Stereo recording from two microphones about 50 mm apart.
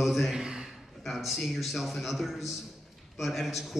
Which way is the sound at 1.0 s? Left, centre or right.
Centre.